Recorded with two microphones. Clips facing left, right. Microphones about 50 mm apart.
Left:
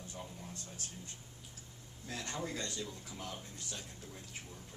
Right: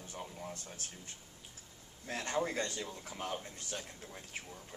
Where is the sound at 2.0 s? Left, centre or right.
Right.